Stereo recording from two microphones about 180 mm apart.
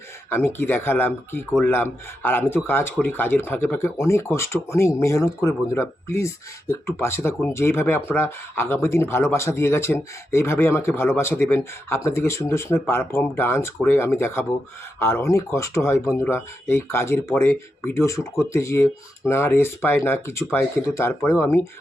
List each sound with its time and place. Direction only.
0.3 s speech: 10° left (ahead or behind)